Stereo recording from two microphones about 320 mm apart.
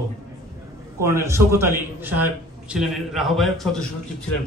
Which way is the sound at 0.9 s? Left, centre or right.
Centre.